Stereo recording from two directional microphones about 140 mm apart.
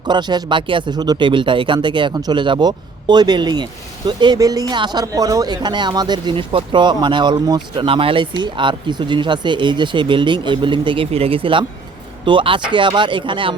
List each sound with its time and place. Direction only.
0.1 s speech: 30° right (ahead or behind)